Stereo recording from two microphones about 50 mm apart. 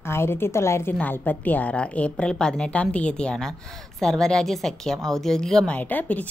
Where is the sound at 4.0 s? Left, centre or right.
Centre.